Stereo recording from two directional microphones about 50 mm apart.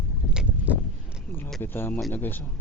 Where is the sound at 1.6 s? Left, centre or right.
Left.